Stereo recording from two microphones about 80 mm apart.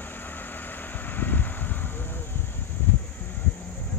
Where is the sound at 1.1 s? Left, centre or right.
Left.